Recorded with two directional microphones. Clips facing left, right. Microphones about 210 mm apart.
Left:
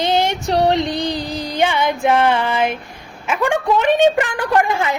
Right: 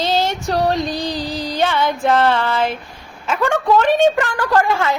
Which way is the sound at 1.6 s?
15° left (ahead or behind).